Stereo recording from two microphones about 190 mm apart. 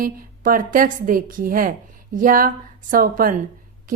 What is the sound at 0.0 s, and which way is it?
Speech, 45° right (ahead or behind).